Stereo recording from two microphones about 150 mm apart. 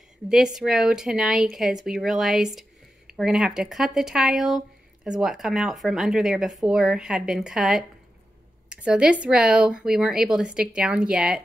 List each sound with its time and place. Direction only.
0.6 s speech: 5° right (ahead or behind)